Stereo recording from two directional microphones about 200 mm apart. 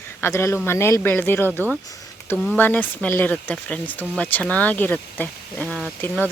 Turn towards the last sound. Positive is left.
turn(degrees=10)  # may be behind; listen again after turning